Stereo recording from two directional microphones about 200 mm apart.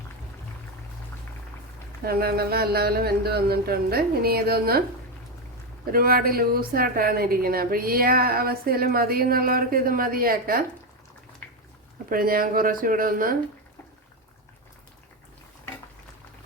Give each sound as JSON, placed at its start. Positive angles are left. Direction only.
{"t": 2.0, "sound": "a woman's voice", "side_deg": -50}
{"t": 5.9, "sound": "a woman's voice", "side_deg": -45}
{"t": 11.4, "sound": "a sound", "side_deg": 5}
{"t": 12.0, "sound": "a woman's voice", "side_deg": -45}